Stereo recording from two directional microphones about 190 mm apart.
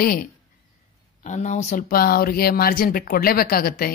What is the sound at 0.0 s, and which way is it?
A woman's voice, 45° left (ahead or behind).